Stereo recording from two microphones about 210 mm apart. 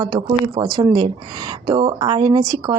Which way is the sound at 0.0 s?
20° right (ahead or behind).